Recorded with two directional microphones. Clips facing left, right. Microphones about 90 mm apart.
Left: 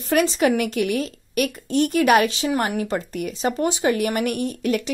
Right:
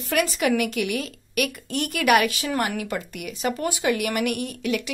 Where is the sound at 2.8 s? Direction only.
35° left (ahead or behind).